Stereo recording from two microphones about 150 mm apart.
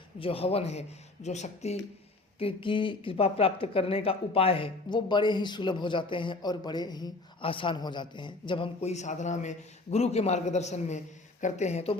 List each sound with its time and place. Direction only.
0.2 s a man's voice: 40° left (ahead or behind)
2.4 s a woman's voice: 35° left (ahead or behind)
8.9 s a man's voice: 50° left (ahead or behind)